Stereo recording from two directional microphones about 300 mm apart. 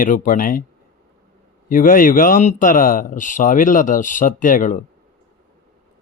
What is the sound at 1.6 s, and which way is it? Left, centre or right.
A man's voice, left.